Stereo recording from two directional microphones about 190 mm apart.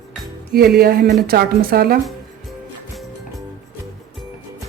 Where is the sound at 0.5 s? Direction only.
55° right (ahead or behind).